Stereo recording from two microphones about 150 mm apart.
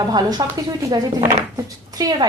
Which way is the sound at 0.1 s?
30° right (ahead or behind).